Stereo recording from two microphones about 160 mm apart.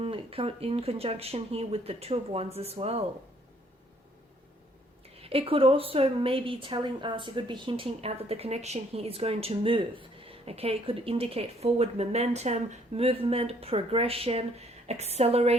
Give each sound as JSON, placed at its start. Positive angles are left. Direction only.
{"t": 0.0, "sound": "speech", "side_deg": -35}
{"t": 5.1, "sound": "speech", "side_deg": -35}